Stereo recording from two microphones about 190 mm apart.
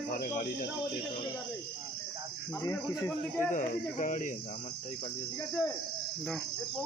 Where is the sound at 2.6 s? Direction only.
20° left (ahead or behind).